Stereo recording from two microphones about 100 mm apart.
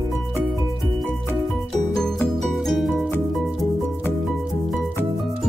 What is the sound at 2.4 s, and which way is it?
Music, centre (ahead or behind).